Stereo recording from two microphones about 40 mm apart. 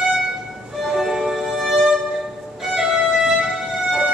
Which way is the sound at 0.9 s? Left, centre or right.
Centre.